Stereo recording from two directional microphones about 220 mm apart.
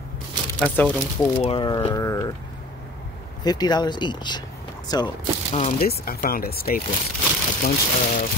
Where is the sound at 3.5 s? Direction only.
20° left (ahead or behind).